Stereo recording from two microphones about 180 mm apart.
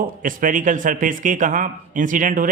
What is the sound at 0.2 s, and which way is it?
A man's voice, 50° right (ahead or behind).